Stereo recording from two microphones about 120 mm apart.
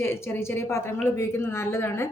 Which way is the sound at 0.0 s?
20° left (ahead or behind).